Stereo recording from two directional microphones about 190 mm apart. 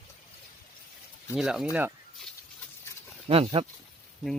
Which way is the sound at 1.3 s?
5° right (ahead or behind).